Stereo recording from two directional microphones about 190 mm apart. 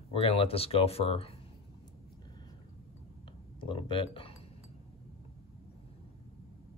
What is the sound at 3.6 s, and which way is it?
Speech, 25° left (ahead or behind).